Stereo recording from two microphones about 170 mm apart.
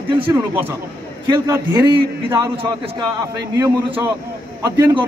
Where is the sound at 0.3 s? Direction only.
15° right (ahead or behind).